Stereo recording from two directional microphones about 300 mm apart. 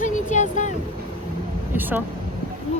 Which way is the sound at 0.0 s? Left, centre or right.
Left.